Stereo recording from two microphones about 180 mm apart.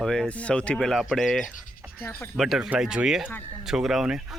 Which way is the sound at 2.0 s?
10° left (ahead or behind).